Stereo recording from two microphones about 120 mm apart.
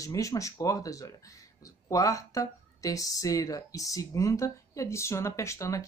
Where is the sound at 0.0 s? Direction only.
25° left (ahead or behind).